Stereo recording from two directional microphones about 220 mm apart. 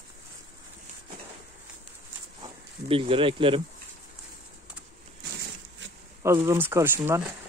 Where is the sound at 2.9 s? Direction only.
25° right (ahead or behind).